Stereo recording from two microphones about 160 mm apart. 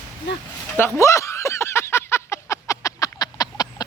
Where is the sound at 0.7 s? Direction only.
15° left (ahead or behind).